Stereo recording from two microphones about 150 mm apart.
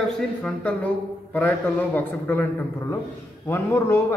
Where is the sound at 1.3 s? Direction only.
10° left (ahead or behind).